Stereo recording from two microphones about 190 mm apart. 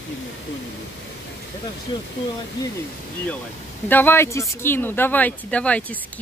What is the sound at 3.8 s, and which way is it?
Speech, 10° left (ahead or behind).